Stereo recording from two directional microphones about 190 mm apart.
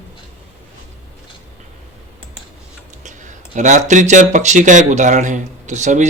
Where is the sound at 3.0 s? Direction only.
40° right (ahead or behind).